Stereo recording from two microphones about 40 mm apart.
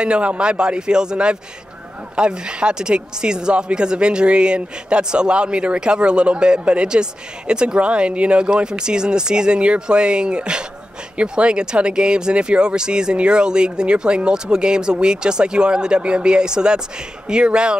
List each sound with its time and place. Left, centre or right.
0.0 s speech: right